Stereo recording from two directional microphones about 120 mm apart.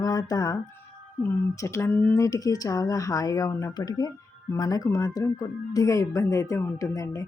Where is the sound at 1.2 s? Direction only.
20° left (ahead or behind).